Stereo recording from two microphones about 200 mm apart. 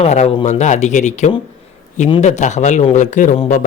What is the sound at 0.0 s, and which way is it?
A man's voice, 35° left (ahead or behind).